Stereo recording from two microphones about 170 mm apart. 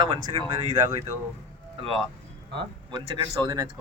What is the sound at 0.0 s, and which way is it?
Speech, 25° right (ahead or behind).